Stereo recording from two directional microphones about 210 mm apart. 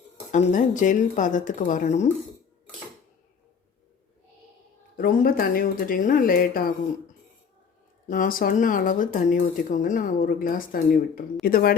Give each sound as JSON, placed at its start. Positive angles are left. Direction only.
{"t": 0.5, "sound": "speech", "side_deg": 35}
{"t": 4.9, "sound": "speech", "side_deg": 45}
{"t": 8.0, "sound": "speech", "side_deg": 40}